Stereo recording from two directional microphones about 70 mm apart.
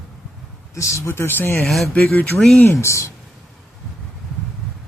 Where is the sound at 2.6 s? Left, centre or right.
Left.